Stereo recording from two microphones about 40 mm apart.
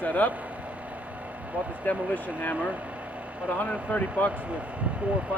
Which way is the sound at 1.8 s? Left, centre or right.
Left.